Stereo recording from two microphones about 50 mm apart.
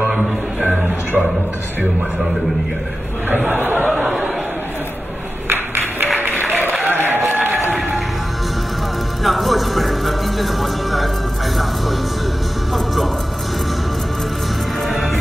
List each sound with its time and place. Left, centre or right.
0.8 s music: right
3.4 s music: right
5.5 s music: right
6.9 s applause: right
9.2 s music: centre
12.7 s music: centre
14.9 s music: centre